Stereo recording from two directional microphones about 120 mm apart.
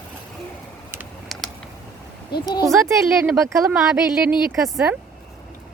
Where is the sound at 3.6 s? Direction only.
5° right (ahead or behind).